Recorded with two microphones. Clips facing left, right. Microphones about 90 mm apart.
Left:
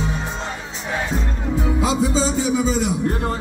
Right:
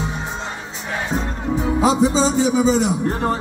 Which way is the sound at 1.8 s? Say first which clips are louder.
Right 5 dB; 30° right (ahead or behind).